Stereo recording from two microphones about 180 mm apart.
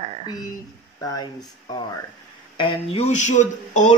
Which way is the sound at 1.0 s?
20° left (ahead or behind).